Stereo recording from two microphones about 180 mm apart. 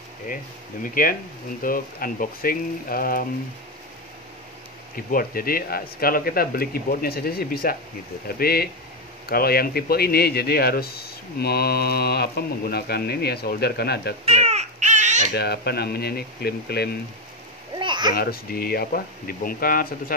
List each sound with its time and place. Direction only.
1.6 s speech: 50° left (ahead or behind)
4.9 s speech: 55° left (ahead or behind)
14.2 s baby cry: 35° right (ahead or behind)
15.3 s speech: 65° left (ahead or behind)
17.7 s a sound: 25° right (ahead or behind)
18.1 s speech: 55° left (ahead or behind)